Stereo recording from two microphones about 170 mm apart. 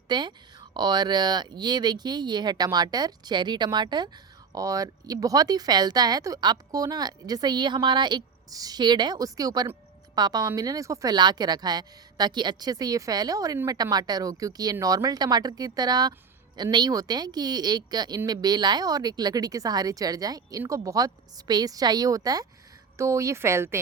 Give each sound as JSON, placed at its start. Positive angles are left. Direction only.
{"t": 0.1, "sound": "a woman's voice", "side_deg": -25}